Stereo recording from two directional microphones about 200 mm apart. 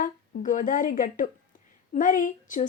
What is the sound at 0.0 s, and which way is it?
Speech, 40° left (ahead or behind).